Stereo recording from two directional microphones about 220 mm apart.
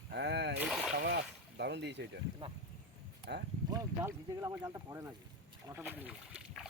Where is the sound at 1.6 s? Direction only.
50° right (ahead or behind).